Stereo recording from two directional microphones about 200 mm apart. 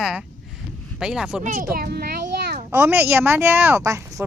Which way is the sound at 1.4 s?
40° right (ahead or behind).